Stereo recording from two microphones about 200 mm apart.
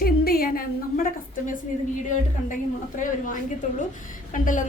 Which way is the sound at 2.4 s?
40° left (ahead or behind).